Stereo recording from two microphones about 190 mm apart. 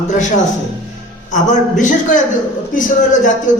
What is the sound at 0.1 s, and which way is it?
A man's voice, 40° left (ahead or behind).